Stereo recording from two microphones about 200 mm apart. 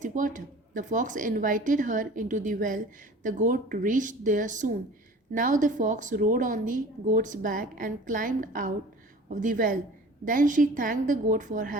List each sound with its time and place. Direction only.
0.0 s a woman's voice: 40° right (ahead or behind)